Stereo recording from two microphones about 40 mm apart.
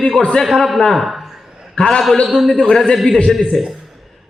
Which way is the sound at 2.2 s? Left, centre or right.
Centre.